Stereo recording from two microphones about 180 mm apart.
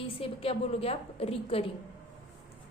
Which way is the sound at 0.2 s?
30° left (ahead or behind).